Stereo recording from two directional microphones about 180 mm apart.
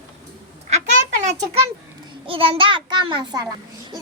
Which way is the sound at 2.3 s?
30° right (ahead or behind).